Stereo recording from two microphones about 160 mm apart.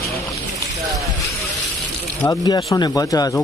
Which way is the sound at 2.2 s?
25° left (ahead or behind).